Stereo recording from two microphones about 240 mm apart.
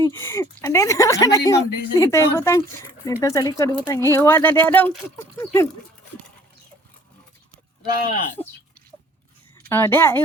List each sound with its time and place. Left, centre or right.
0.0 s speech: centre
7.9 s speech: left
9.6 s speech: centre